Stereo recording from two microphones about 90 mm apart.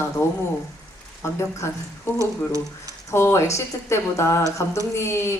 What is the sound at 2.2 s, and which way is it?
Speech, 35° right (ahead or behind).